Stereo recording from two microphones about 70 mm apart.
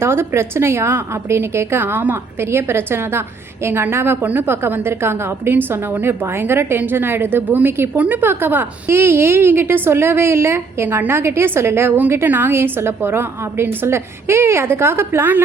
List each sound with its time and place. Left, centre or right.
0.0 s a woman's voice: right